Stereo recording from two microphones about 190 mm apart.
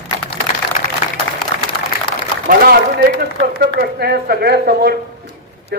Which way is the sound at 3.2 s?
55° right (ahead or behind).